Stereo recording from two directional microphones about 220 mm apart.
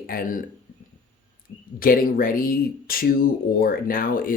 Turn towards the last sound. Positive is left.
turn(degrees=40)  # may be behind; listen again after turning